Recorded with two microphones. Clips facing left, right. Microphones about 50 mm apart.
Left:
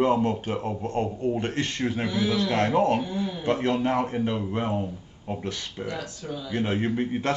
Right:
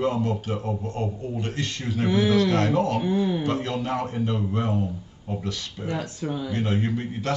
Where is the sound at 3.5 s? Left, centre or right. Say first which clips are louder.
Left 3 dB; left.